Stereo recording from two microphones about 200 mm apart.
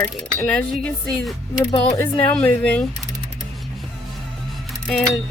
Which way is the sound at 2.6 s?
5° left (ahead or behind).